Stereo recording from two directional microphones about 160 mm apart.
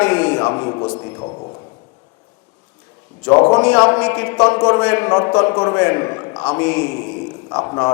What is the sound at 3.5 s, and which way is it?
A man's voice, 10° left (ahead or behind).